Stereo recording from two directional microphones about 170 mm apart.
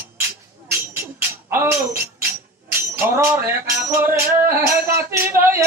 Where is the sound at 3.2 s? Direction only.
15° right (ahead or behind).